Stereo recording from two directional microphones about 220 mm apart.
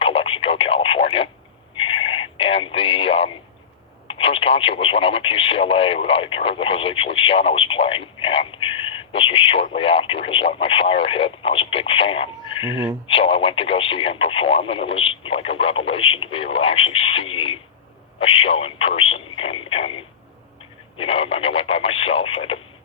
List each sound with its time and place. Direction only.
0.0 s radio: 25° left (ahead or behind)
1.7 s a sound: 25° left (ahead or behind)
4.1 s speech: 25° left (ahead or behind)
21.0 s speech: 25° left (ahead or behind)